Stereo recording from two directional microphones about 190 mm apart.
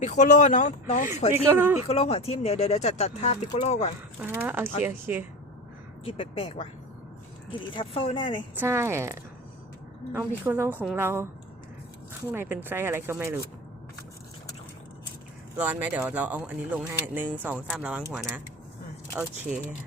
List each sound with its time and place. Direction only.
0.0 s speech: 40° left (ahead or behind)
1.5 s speech: 10° right (ahead or behind)
1.9 s speech: 30° left (ahead or behind)
4.2 s speech: 10° right (ahead or behind)
6.1 s speech: 30° left (ahead or behind)
7.7 s speech: 25° left (ahead or behind)
8.5 s speech: 15° right (ahead or behind)
12.3 s speech: 10° right (ahead or behind)
15.5 s speech: 10° right (ahead or behind)
18.0 s speech: 15° right (ahead or behind)
19.5 s speech: centre (ahead or behind)